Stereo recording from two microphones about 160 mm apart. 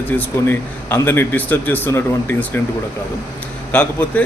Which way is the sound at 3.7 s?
10° left (ahead or behind).